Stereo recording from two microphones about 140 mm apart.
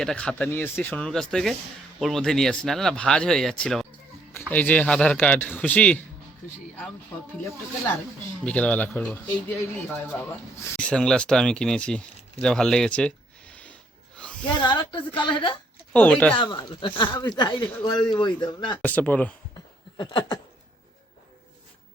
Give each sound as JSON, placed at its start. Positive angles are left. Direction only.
{"t": 0.0, "sound": "a man's voice", "side_deg": 5}
{"t": 8.4, "sound": "a man's voice", "side_deg": 10}
{"t": 14.4, "sound": "speech", "side_deg": 35}
{"t": 15.9, "sound": "a man's voice", "side_deg": 10}
{"t": 16.3, "sound": "speech", "side_deg": 35}
{"t": 18.8, "sound": "a man's voice", "side_deg": 10}
{"t": 20.0, "sound": "speech", "side_deg": 35}